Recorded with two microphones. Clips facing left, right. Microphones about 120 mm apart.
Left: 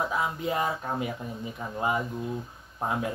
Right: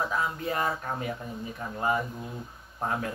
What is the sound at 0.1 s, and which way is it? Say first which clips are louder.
Speech: left 1 dB; 15° left (ahead or behind).